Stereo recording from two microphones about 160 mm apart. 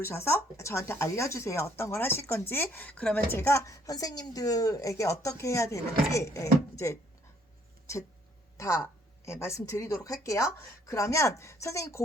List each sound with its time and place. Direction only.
0.0 s a woman's voice: 15° left (ahead or behind)
8.5 s a woman's voice: 20° left (ahead or behind)